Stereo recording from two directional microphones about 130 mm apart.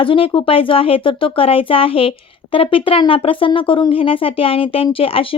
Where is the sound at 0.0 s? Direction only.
40° left (ahead or behind).